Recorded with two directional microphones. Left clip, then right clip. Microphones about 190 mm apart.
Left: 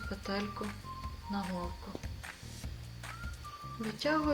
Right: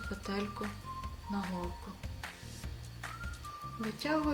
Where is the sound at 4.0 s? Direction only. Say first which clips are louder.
Left 2 dB; 20° right (ahead or behind).